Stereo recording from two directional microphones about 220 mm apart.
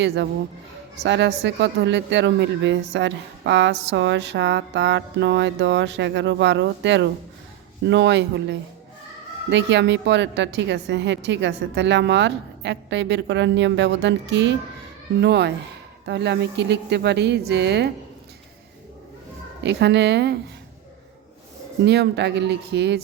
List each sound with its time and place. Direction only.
0.0 s a woman's voice: 50° right (ahead or behind)
19.6 s a woman's voice: 50° right (ahead or behind)
21.8 s a woman's voice: 50° right (ahead or behind)